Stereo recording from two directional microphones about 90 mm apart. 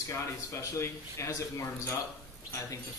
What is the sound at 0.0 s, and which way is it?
A man's voice, 35° left (ahead or behind).